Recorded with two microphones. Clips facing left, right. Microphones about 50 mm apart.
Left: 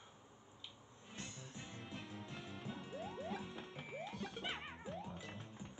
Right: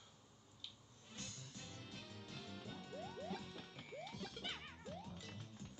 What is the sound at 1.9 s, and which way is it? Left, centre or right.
Music, centre.